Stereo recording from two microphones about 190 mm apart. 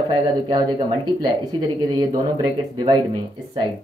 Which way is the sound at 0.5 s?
25° right (ahead or behind).